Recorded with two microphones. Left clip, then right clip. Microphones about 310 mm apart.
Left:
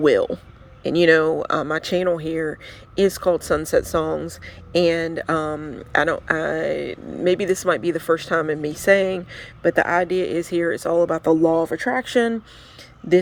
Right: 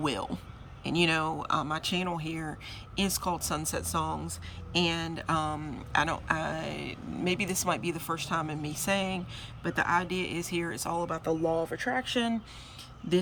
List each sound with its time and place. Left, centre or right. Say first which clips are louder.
0.0 s speech: left 15 dB; centre